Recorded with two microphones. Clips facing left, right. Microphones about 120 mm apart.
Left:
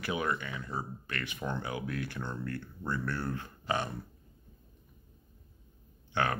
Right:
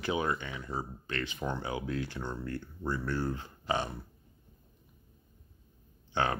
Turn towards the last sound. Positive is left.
turn(degrees=-25)  # may be behind; listen again after turning